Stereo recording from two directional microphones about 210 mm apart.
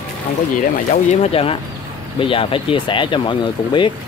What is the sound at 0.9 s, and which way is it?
Speech, 30° left (ahead or behind).